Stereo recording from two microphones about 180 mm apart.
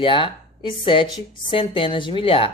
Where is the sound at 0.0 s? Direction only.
30° left (ahead or behind).